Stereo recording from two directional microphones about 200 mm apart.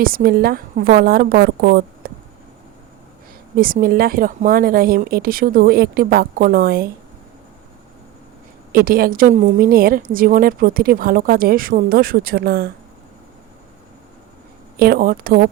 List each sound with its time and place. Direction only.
0.0 s a woman's voice: 45° right (ahead or behind)
3.6 s a woman's voice: 45° right (ahead or behind)
8.7 s a woman's voice: 45° right (ahead or behind)
14.8 s a woman's voice: 45° right (ahead or behind)